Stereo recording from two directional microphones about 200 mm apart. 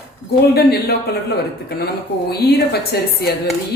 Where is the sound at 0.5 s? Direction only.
50° left (ahead or behind).